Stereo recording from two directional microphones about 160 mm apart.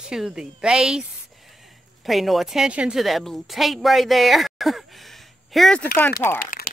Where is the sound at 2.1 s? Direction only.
Centre (ahead or behind).